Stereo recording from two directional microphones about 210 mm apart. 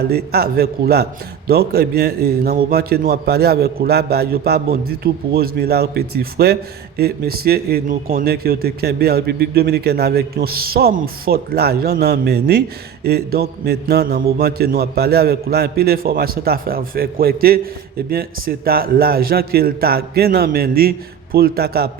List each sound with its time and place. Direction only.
0.1 s a man's voice: 50° right (ahead or behind)